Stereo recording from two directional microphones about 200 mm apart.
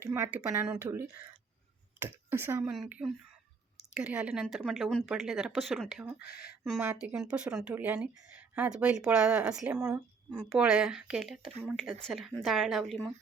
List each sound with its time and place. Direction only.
0.0 s speech: 10° right (ahead or behind)
6.1 s speech: 50° left (ahead or behind)
6.7 s speech: 10° right (ahead or behind)